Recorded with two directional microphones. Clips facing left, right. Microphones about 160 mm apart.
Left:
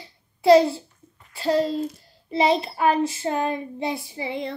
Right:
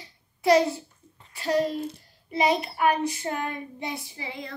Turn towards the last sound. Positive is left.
turn(degrees=25)  # may be behind; listen again after turning